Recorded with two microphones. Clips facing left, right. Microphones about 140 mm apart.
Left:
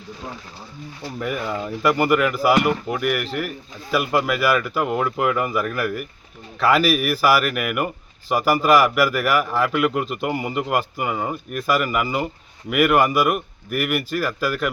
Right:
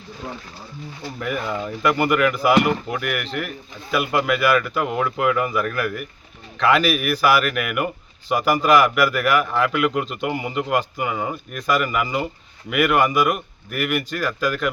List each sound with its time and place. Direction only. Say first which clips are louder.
1.2 s speech: even; centre (ahead or behind)